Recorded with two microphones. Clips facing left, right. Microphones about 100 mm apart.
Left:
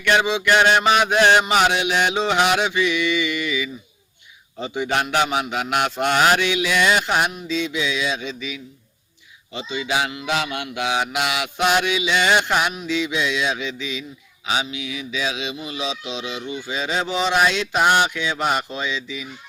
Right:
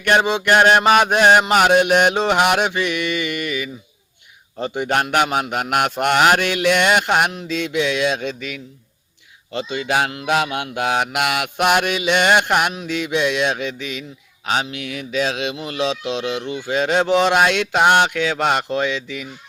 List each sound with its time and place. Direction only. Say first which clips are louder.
0.0 s mantra: right 2 dB; 45° right (ahead or behind); by 19.3 s 60° right (ahead or behind)